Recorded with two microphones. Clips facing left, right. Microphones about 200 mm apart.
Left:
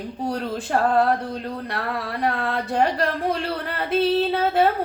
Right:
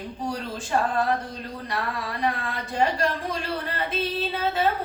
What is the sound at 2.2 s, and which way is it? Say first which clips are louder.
Speech: left 4 dB; 60° left (ahead or behind).